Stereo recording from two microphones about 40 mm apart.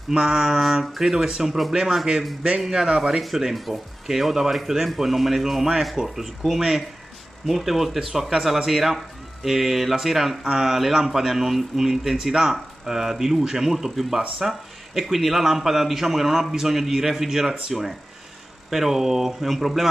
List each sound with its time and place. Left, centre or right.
0.1 s a man's voice: centre
1.1 s speech: centre
1.5 s a man's voice: centre
2.7 s speech: right
3.2 s a man's voice: centre
18.7 s speech: centre